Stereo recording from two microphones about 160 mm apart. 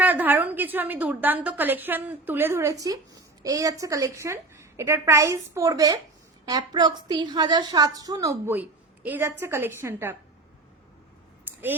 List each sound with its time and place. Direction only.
0.0 s a woman's voice: 10° right (ahead or behind)